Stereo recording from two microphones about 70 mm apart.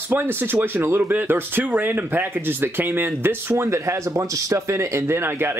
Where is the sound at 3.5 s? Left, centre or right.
Right.